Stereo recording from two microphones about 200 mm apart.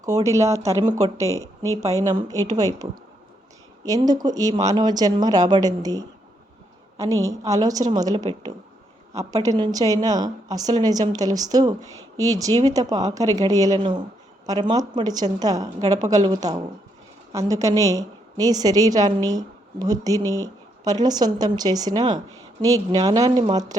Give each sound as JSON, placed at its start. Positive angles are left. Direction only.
{"t": 0.0, "sound": "a woman's voice", "side_deg": -15}
{"t": 3.8, "sound": "a woman's voice", "side_deg": -20}